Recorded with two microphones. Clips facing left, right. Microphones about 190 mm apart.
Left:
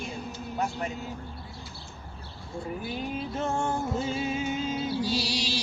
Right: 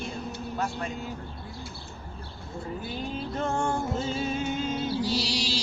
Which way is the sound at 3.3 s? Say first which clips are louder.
Right 2 dB; 5° left (ahead or behind).